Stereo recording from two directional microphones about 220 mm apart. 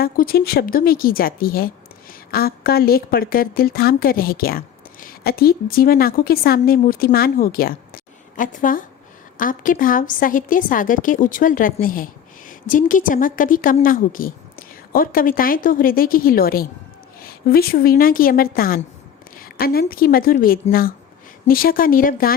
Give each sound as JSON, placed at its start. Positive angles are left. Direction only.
{"t": 0.0, "sound": "a woman's voice", "side_deg": 45}